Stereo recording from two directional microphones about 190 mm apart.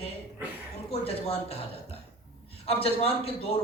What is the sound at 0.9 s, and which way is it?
Speech, 30° left (ahead or behind).